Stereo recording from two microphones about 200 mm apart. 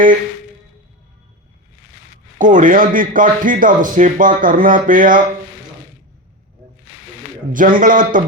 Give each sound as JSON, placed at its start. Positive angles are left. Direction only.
{"t": 2.4, "sound": "a man's voice", "side_deg": -40}
{"t": 7.5, "sound": "a man's voice", "side_deg": -40}